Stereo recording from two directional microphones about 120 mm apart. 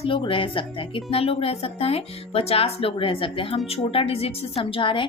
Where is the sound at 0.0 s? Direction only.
50° left (ahead or behind).